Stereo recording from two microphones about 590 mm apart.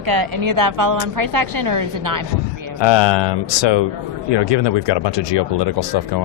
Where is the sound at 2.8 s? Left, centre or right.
Left.